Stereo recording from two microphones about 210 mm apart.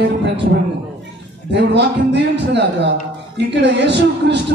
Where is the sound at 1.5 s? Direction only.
55° right (ahead or behind).